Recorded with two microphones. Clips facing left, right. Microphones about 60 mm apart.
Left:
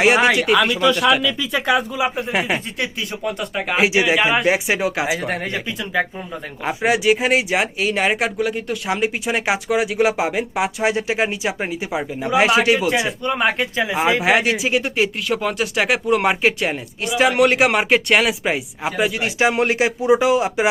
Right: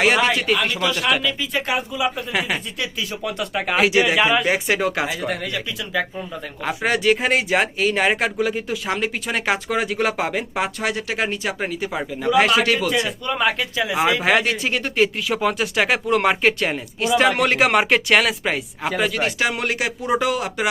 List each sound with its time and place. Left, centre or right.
0.0 s speech: centre
0.7 s speech: centre
2.0 s speech: left
3.3 s speech: centre
5.2 s speech: left
6.7 s speech: centre
10.8 s speech: centre
13.2 s speech: left
14.2 s speech: centre
19.4 s speech: left
20.0 s speech: centre